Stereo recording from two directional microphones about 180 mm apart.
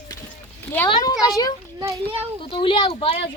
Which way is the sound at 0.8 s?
20° left (ahead or behind).